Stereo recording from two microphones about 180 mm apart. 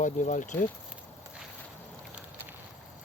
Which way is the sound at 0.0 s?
45° left (ahead or behind).